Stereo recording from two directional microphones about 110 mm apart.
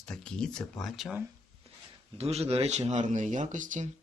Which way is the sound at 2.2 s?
70° right (ahead or behind).